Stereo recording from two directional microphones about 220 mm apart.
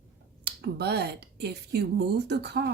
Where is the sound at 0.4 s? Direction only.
50° right (ahead or behind).